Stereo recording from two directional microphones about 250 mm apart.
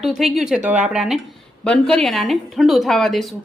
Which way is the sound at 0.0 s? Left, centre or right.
Centre.